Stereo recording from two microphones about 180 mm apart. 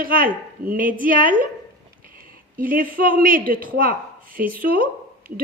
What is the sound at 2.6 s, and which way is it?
Speech, 50° right (ahead or behind).